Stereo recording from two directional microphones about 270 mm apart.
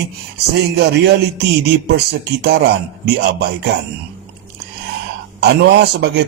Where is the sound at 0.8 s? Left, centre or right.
Right.